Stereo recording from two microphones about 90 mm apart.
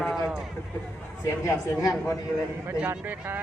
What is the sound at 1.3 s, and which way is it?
Speech, 35° left (ahead or behind).